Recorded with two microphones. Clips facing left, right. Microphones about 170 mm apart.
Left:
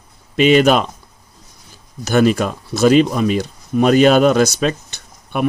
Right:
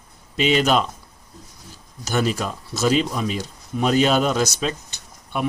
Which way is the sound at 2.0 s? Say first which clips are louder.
Left 8 dB; 65° left (ahead or behind).